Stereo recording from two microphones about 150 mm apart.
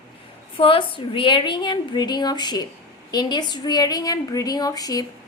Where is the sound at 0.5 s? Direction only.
35° left (ahead or behind).